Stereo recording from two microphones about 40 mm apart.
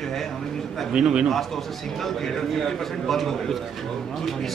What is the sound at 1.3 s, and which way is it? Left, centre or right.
A man's voice, centre.